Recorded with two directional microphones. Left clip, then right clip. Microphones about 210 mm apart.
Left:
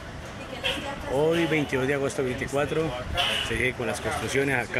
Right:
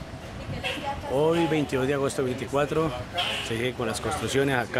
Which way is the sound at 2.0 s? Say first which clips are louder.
Even; 20° right (ahead or behind).